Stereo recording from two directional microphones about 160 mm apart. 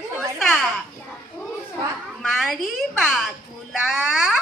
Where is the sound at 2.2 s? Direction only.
Centre (ahead or behind).